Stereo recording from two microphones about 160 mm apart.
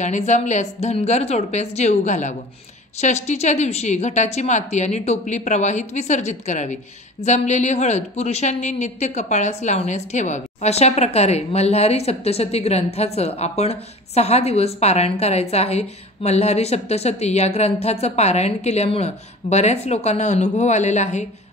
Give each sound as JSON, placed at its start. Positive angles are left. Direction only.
{"t": 0.0, "sound": "a woman's voice", "side_deg": 45}